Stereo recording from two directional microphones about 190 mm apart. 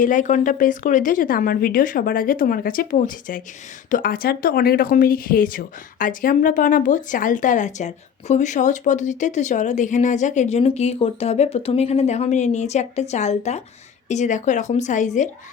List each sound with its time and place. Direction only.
0.0 s speech: 45° left (ahead or behind)